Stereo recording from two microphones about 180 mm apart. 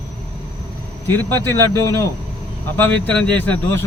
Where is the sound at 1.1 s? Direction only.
10° left (ahead or behind).